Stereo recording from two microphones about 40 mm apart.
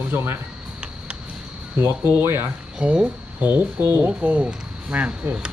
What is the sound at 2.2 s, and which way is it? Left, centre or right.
Speech, right.